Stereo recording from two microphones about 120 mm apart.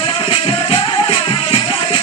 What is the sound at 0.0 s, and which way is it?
Music, 50° left (ahead or behind).